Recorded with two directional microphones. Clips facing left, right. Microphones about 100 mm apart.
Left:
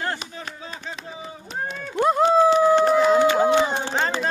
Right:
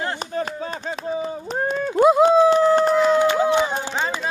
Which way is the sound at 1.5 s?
40° right (ahead or behind).